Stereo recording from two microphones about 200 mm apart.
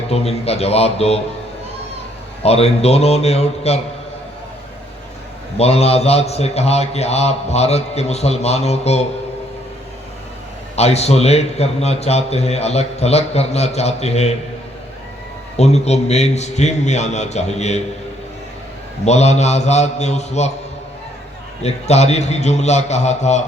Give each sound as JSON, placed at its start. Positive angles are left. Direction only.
{"t": 0.1, "sound": "a man's voice", "side_deg": 30}
{"t": 2.4, "sound": "a man's voice", "side_deg": 30}
{"t": 5.5, "sound": "a man's voice", "side_deg": 30}
{"t": 10.8, "sound": "a man's voice", "side_deg": 30}
{"t": 15.5, "sound": "a man's voice", "side_deg": 35}
{"t": 19.0, "sound": "a man's voice", "side_deg": 35}
{"t": 21.6, "sound": "a man's voice", "side_deg": 35}